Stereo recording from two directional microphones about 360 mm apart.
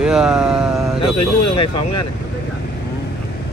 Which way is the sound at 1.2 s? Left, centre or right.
Left.